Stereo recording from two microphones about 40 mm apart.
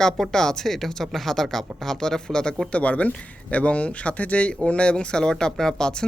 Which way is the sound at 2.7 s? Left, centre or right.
Left.